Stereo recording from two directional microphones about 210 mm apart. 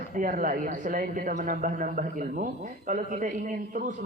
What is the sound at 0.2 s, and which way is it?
A man's voice, 40° right (ahead or behind).